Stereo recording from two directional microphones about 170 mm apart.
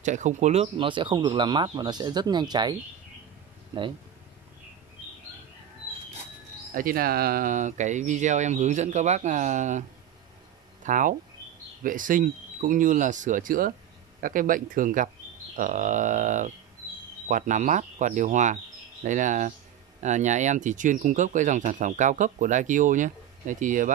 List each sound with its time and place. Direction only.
0.0 s speech: 45° right (ahead or behind); by 2.7 s 25° right (ahead or behind)
6.7 s speech: 55° right (ahead or behind)